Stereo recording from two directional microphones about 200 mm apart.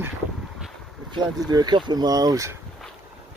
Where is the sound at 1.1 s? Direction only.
20° right (ahead or behind).